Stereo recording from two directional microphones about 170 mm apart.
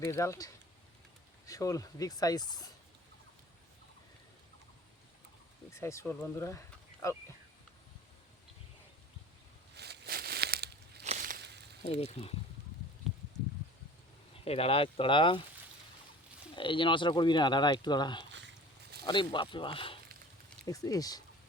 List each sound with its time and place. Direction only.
0.0 s speech: 15° left (ahead or behind)
5.7 s speech: 15° left (ahead or behind)
9.7 s a sound: 75° right (ahead or behind)
11.0 s a sound: 45° right (ahead or behind)
11.3 s a sound: 80° right
11.8 s speech: 35° left (ahead or behind)
14.3 s speech: 35° left (ahead or behind)
16.6 s speech: 30° left (ahead or behind)
18.3 s dog: 90° right
19.0 s speech: 30° left (ahead or behind)
20.7 s speech: 20° left (ahead or behind)